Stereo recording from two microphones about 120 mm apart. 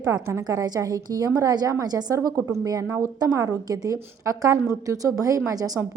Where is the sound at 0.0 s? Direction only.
30° right (ahead or behind).